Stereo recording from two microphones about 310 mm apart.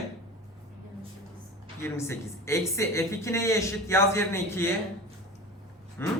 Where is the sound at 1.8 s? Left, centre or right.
Centre.